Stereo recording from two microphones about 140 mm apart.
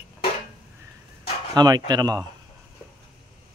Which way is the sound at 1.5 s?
30° right (ahead or behind).